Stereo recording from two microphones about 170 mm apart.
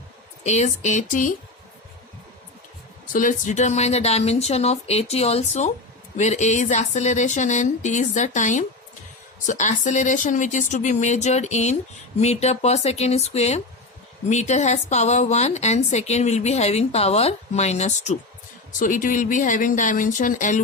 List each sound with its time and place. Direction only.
0.4 s speech: 40° left (ahead or behind)
3.1 s a woman's voice: 50° left (ahead or behind)